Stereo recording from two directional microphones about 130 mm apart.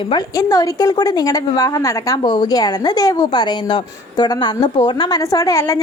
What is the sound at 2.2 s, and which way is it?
A woman's voice, 35° left (ahead or behind).